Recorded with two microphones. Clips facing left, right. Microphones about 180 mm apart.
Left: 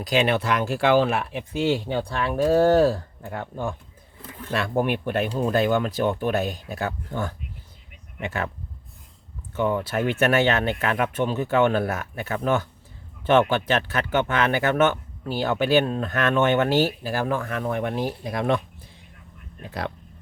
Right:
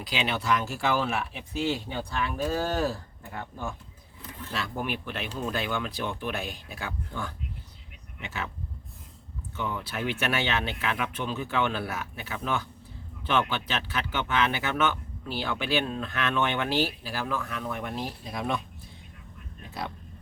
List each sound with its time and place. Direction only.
0.0 s speech: 50° left (ahead or behind)
9.6 s speech: 50° left (ahead or behind)